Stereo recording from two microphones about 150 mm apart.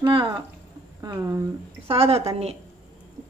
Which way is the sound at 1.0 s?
25° right (ahead or behind).